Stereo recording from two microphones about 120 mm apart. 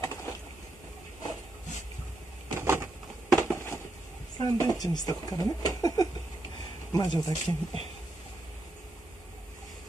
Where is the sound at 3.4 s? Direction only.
20° left (ahead or behind).